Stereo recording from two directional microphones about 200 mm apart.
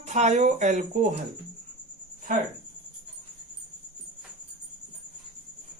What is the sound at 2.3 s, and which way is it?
Speech, 40° right (ahead or behind).